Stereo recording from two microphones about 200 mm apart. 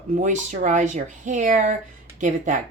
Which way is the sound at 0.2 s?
35° right (ahead or behind).